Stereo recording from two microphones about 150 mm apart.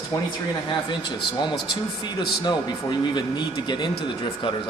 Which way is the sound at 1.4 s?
30° left (ahead or behind).